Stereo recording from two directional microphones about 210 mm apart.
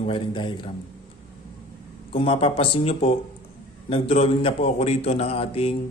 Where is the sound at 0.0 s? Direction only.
25° left (ahead or behind).